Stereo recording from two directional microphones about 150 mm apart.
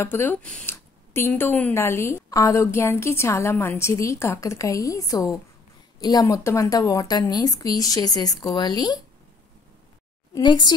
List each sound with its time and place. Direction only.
0.0 s a woman's voice: 15° left (ahead or behind)
10.3 s a woman's voice: 30° left (ahead or behind)